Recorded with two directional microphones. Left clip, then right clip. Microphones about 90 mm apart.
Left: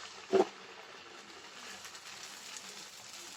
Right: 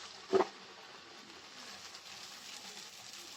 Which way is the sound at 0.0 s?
35° left (ahead or behind).